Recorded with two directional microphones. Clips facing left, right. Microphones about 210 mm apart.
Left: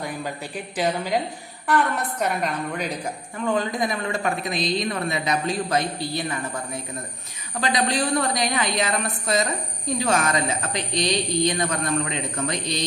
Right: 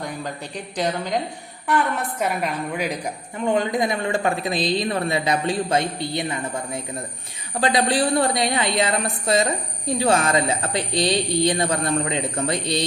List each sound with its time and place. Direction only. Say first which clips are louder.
0.5 s a woman's voice: even; 5° left (ahead or behind)
2.2 s a woman's voice: right 1 dB; 5° right (ahead or behind)
3.4 s speech: right 3 dB; 25° right (ahead or behind)
7.6 s speech: right 3 dB; 30° right (ahead or behind)